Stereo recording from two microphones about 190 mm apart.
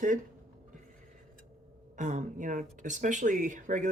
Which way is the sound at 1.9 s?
40° right (ahead or behind).